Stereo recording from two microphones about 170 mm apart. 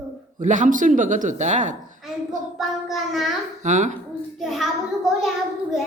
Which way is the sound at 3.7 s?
45° right (ahead or behind).